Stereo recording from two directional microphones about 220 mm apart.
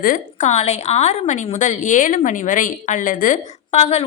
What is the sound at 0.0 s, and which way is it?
A woman's voice, 35° left (ahead or behind).